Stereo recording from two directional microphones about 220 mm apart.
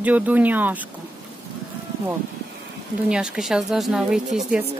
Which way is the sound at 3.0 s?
5° right (ahead or behind).